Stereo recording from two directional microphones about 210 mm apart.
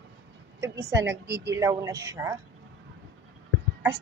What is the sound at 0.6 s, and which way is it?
A woman's voice, 15° right (ahead or behind).